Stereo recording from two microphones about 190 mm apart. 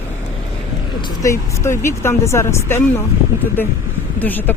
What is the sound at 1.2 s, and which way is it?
Speech, 15° left (ahead or behind).